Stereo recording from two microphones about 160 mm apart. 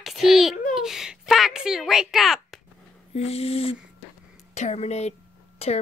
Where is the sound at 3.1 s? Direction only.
40° left (ahead or behind).